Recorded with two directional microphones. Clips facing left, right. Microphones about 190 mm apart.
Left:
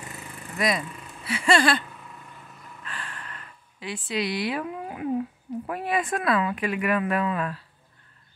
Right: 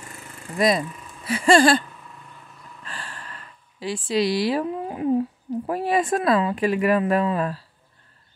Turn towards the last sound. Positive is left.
turn(degrees=-35)  # may be behind; listen again after turning